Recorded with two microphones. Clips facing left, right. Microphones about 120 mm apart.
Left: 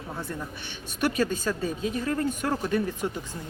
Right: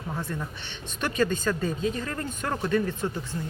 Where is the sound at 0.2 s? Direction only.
10° left (ahead or behind).